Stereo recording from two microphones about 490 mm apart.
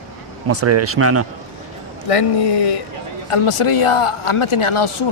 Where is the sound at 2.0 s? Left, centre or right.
Left.